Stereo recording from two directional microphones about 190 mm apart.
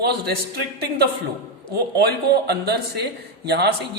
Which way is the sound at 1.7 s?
60° right (ahead or behind).